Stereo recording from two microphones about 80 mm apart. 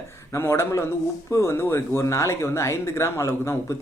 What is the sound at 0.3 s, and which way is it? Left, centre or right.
Speech, left.